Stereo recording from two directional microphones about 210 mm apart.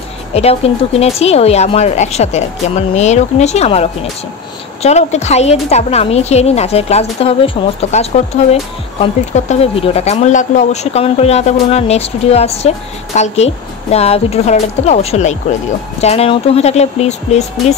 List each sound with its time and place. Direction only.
0.3 s speech: 30° left (ahead or behind)